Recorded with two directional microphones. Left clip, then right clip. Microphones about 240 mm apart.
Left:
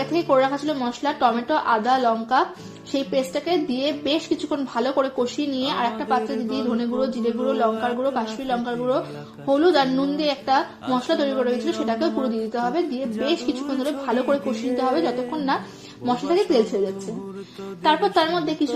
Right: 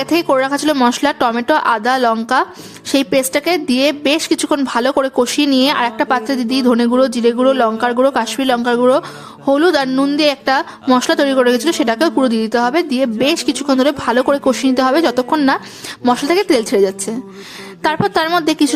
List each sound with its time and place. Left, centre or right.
0.0 s a woman's voice: right
17.8 s a woman's voice: right